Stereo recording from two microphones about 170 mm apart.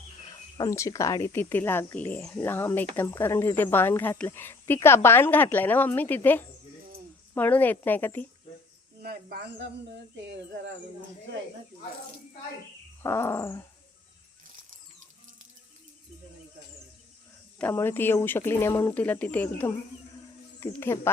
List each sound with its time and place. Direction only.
0.5 s speech: 20° left (ahead or behind)
9.0 s speech: 65° right (ahead or behind)
10.2 s speech: 90° right
13.0 s speech: 15° left (ahead or behind)
17.6 s speech: 15° left (ahead or behind)